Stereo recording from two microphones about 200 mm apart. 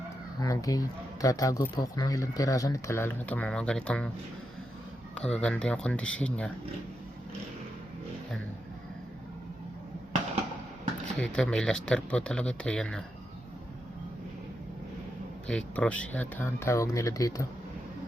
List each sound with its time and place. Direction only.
0.3 s speech: 15° left (ahead or behind)
5.1 s speech: 5° left (ahead or behind)
11.2 s speech: 5° left (ahead or behind)
15.4 s speech: 5° left (ahead or behind)